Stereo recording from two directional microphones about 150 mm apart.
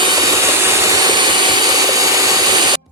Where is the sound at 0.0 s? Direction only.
25° right (ahead or behind).